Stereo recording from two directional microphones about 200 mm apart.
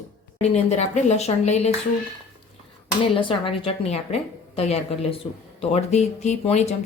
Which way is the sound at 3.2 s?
25° left (ahead or behind).